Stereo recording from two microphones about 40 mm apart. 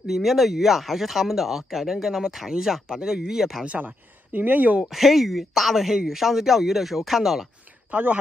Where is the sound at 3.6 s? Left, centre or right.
Right.